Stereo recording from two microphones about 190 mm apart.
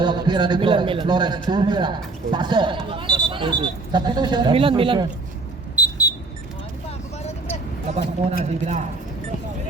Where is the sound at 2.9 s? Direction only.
25° right (ahead or behind).